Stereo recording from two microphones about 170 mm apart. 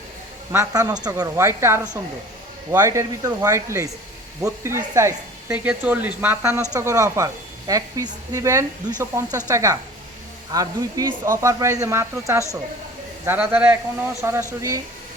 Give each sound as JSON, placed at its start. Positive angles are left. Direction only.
{"t": 0.5, "sound": "speech", "side_deg": -20}